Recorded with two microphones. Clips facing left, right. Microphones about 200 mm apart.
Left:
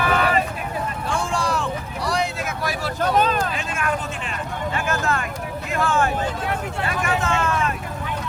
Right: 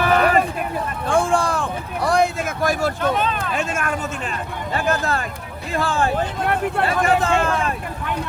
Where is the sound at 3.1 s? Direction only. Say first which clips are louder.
Left 2 dB; 40° left (ahead or behind).